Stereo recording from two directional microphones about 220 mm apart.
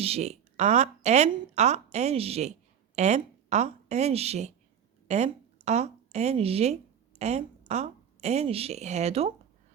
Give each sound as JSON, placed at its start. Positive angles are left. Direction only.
{"t": 0.0, "sound": "a woman's voice", "side_deg": -30}